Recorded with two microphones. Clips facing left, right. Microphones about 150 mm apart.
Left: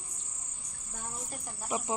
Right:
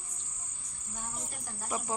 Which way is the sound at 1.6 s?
15° left (ahead or behind).